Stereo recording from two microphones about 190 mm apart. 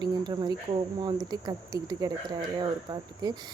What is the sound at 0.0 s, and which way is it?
Speech, 20° right (ahead or behind).